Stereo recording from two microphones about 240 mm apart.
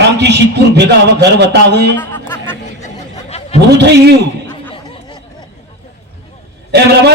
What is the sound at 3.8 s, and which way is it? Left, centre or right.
Speech, right.